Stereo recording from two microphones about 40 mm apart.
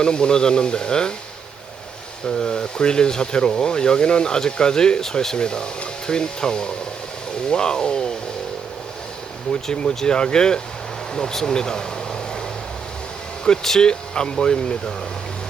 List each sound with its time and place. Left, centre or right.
0.0 s speech: left
2.2 s speech: centre
9.5 s speech: left
13.7 s speech: centre